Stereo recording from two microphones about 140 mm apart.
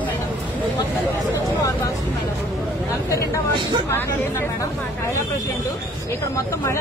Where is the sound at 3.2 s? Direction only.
35° right (ahead or behind).